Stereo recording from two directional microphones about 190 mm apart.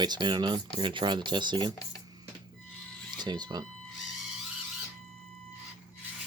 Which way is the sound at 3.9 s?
Centre (ahead or behind).